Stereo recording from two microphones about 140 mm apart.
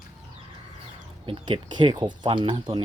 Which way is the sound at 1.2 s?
35° right (ahead or behind).